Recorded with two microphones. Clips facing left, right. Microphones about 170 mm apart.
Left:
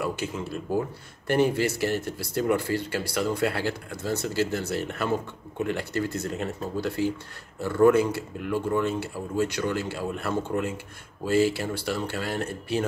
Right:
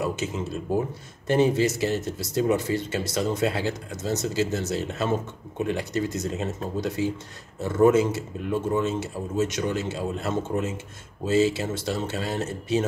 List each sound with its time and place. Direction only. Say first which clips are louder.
0.0 s speech: right 2 dB; 20° right (ahead or behind)